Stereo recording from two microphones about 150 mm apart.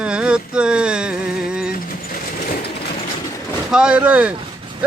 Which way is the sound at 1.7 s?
70° left (ahead or behind).